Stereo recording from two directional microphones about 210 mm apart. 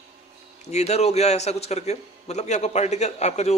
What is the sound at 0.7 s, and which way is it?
A man's voice, 30° left (ahead or behind).